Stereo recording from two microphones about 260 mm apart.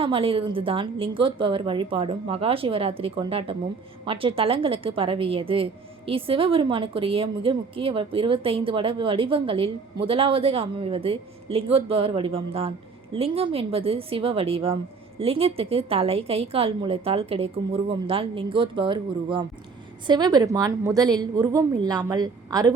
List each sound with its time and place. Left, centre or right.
0.0 s a woman's voice: right